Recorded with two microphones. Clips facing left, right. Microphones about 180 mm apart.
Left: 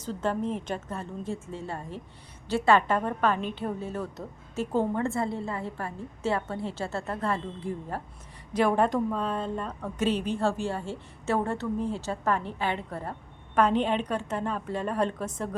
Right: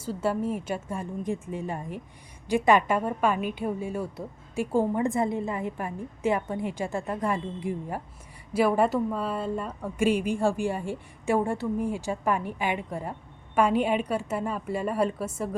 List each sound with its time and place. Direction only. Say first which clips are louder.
0.0 s a woman's voice: right 2 dB; 10° right (ahead or behind)